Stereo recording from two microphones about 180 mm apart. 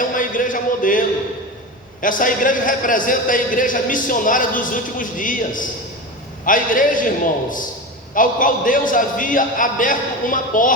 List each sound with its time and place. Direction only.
0.0 s a sound: 50° left (ahead or behind)
2.0 s a man's voice: 50° left (ahead or behind)
8.1 s a man's voice: 50° left (ahead or behind)